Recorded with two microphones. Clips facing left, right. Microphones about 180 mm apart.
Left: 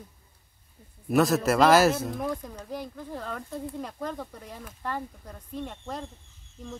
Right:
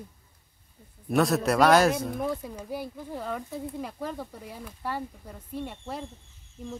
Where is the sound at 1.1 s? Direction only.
Centre (ahead or behind).